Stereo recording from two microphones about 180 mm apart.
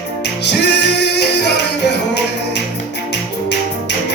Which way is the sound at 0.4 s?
70° left (ahead or behind).